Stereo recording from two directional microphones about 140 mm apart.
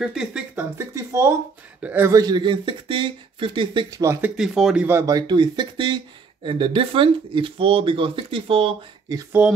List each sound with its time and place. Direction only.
0.0 s speech: 5° right (ahead or behind)
0.6 s a man's voice: 20° right (ahead or behind)
2.1 s speech: 30° right (ahead or behind)
4.0 s a man's voice: 20° right (ahead or behind)
4.4 s speech: 5° right (ahead or behind)
4.8 s speech: 20° right (ahead or behind); by 8.7 s 40° right (ahead or behind)
9.4 s a man's voice: 10° right (ahead or behind)